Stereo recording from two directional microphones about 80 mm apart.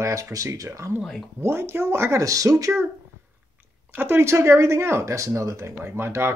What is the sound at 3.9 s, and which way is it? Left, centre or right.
Speech, right.